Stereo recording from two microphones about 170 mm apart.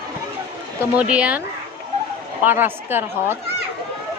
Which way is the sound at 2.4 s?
10° right (ahead or behind).